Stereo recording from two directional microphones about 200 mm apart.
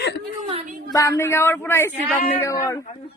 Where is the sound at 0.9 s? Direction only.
15° left (ahead or behind).